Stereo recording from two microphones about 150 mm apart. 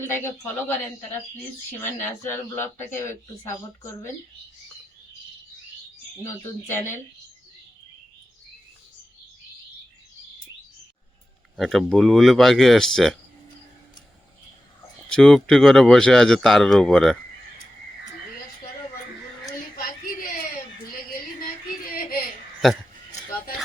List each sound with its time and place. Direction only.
0.0 s speech: 15° left (ahead or behind)
2.2 s speech: 15° left (ahead or behind)
6.2 s speech: 15° left (ahead or behind)
11.5 s speech: centre (ahead or behind)
15.1 s speech: 5° left (ahead or behind)
19.7 s a sound: 75° left (ahead or behind)
22.6 s speech: centre (ahead or behind)